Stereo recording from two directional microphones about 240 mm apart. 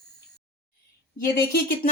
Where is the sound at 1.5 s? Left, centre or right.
Left.